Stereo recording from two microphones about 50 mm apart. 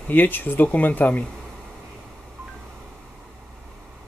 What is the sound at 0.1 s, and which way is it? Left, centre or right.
Speech, left.